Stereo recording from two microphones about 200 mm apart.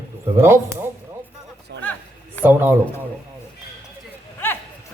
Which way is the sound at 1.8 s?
10° left (ahead or behind).